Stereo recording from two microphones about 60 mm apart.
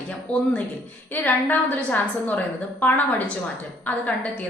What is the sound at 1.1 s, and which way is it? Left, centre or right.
A woman's voice, left.